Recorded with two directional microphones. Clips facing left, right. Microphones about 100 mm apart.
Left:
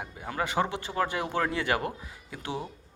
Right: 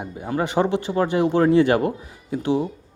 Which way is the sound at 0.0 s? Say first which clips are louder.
Right 8 dB; 25° right (ahead or behind).